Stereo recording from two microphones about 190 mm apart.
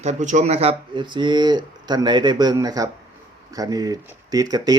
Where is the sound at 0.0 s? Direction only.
40° right (ahead or behind).